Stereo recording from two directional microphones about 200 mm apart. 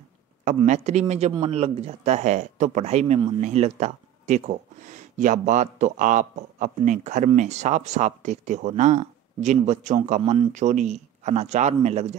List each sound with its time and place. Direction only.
0.6 s speech: 35° right (ahead or behind)